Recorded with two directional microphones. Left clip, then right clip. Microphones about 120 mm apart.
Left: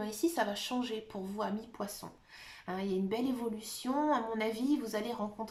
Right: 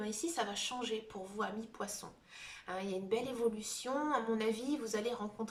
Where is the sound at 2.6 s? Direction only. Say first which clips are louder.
Left 2 dB; 40° left (ahead or behind).